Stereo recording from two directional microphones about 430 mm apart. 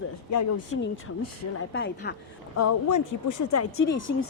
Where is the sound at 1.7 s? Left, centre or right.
Left.